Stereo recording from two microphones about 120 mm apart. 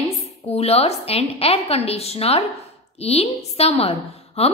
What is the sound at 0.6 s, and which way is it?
A woman's voice, 60° left (ahead or behind).